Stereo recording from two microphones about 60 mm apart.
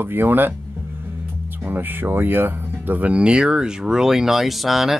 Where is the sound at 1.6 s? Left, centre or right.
Right; by 5.0 s centre.